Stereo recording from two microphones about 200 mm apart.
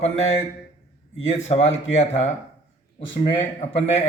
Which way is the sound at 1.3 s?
30° left (ahead or behind).